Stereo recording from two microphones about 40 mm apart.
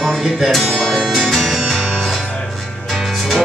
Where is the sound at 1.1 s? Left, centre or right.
Centre.